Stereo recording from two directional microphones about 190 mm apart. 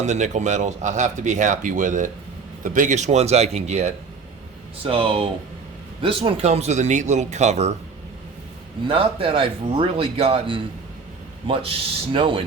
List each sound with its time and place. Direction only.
0.0 s speech: 40° right (ahead or behind)
8.9 s speech: 30° right (ahead or behind)